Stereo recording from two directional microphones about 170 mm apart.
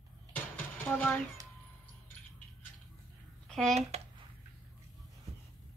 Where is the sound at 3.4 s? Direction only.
5° left (ahead or behind).